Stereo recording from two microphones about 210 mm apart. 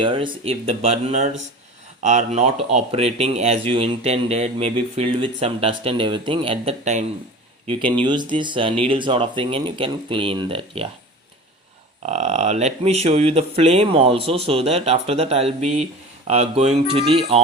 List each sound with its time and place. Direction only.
0.0 s speech: 25° right (ahead or behind)
12.0 s speech: 30° right (ahead or behind)